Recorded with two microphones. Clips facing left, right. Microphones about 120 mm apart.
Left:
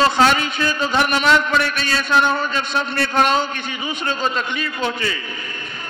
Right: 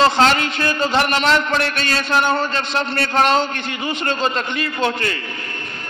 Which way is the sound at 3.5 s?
60° right (ahead or behind).